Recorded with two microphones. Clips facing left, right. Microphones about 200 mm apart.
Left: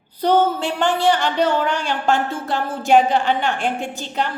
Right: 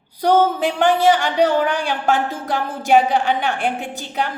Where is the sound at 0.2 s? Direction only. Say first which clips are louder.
Right 1 dB; 15° right (ahead or behind).